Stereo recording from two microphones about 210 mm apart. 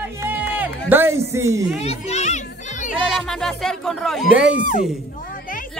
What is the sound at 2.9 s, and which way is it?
Speech, centre (ahead or behind).